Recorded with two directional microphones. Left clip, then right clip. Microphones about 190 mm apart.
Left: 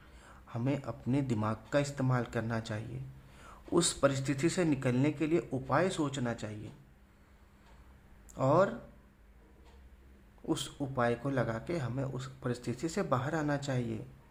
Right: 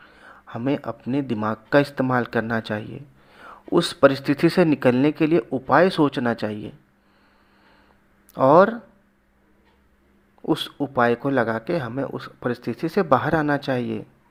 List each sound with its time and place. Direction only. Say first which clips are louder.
0.0 s a sound: right 11 dB; 25° right (ahead or behind)
1.0 s a man's voice: right 8 dB; 20° right (ahead or behind)
8.3 s speech: right 13 dB; 30° right (ahead or behind)
10.4 s a man's voice: right 12 dB; 25° right (ahead or behind)